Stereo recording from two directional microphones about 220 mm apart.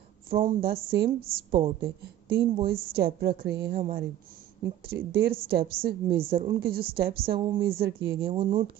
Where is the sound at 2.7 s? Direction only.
45° right (ahead or behind).